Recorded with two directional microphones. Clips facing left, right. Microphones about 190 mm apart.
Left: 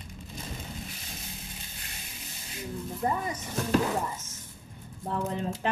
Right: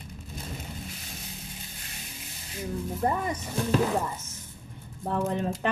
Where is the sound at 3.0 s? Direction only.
55° right (ahead or behind).